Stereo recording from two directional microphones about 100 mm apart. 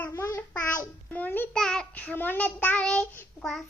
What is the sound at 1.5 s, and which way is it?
Child singing, 5° left (ahead or behind).